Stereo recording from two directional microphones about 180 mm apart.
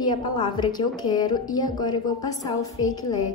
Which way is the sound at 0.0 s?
25° left (ahead or behind).